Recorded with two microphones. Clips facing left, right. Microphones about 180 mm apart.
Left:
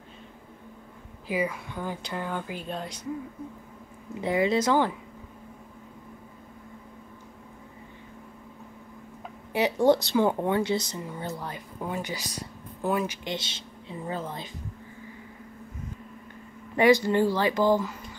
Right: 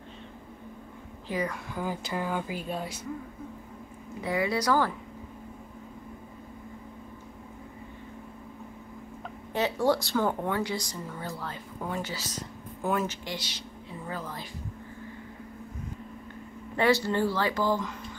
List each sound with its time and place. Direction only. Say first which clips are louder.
1.2 s a woman's voice: left 3 dB; 10° left (ahead or behind)
1.7 s a woman's voice: right 1 dB; 5° right (ahead or behind)
4.2 s speech: left 4 dB; 25° left (ahead or behind)
9.5 s speech: left 4 dB; 15° left (ahead or behind)
16.7 s speech: left 4 dB; 15° left (ahead or behind)